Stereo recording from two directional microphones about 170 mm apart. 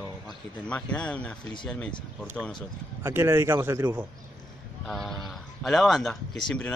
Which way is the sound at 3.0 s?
15° right (ahead or behind).